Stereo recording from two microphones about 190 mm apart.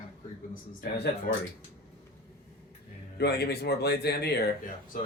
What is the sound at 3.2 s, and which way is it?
Speech, 60° left (ahead or behind).